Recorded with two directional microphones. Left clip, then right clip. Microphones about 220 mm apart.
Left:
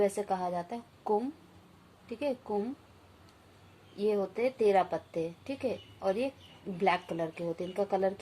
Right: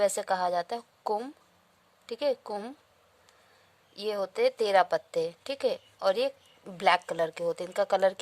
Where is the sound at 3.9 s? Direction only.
55° right (ahead or behind).